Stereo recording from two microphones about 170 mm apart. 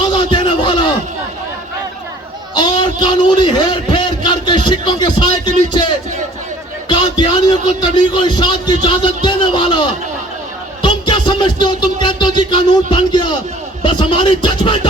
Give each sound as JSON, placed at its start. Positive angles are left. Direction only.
{"t": 0.1, "sound": "a sound", "side_deg": 25}
{"t": 2.6, "sound": "a man's voice", "side_deg": 25}
{"t": 6.8, "sound": "a man's voice", "side_deg": 25}